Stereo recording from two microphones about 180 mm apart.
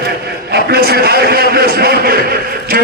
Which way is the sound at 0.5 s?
60° right (ahead or behind).